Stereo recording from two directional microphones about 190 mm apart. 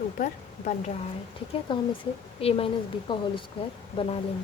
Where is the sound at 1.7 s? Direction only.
25° left (ahead or behind).